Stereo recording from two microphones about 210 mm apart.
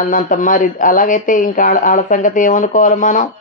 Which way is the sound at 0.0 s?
40° left (ahead or behind).